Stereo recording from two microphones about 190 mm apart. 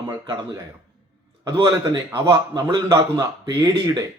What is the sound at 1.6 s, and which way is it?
A man's voice, 20° right (ahead or behind).